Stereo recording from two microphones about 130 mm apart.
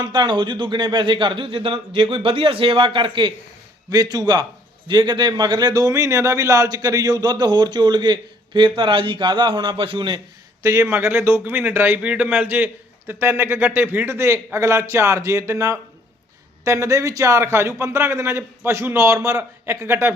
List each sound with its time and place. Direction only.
0.0 s speech: 35° right (ahead or behind)
10.6 s a man's voice: 25° right (ahead or behind)